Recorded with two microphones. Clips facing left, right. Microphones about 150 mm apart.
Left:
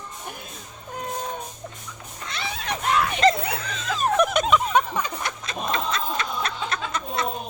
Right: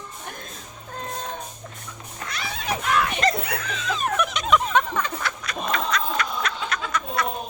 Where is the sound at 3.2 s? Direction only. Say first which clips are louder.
Left 4 dB; 25° left (ahead or behind).